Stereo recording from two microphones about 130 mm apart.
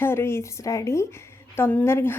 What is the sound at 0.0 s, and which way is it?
Speech, 20° left (ahead or behind).